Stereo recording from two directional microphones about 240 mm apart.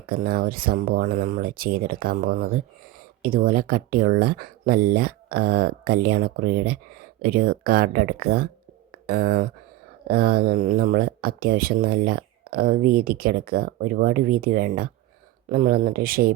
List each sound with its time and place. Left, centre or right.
0.1 s speech: right